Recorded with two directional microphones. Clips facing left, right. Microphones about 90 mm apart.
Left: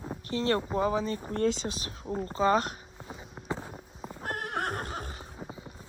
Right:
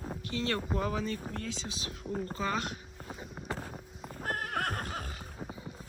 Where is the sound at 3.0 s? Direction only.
20° left (ahead or behind).